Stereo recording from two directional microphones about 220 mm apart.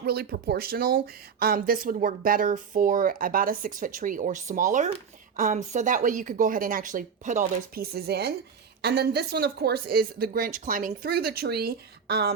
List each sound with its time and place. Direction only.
0.0 s speech: 45° right (ahead or behind)